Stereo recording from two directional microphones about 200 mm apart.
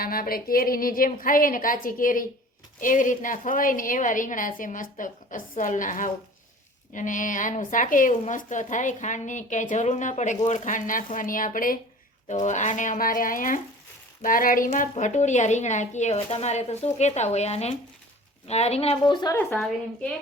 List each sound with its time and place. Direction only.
0.0 s a woman's voice: 45° left (ahead or behind); by 19.4 s 20° left (ahead or behind)
19.4 s a woman's voice: 5° left (ahead or behind)